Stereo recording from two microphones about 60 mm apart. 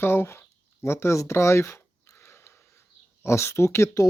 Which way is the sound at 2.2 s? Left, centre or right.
Left.